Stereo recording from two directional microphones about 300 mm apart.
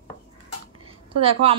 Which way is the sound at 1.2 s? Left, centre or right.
Centre.